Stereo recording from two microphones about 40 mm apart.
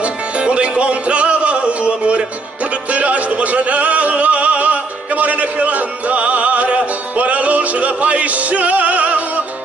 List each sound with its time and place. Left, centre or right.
0.0 s music: right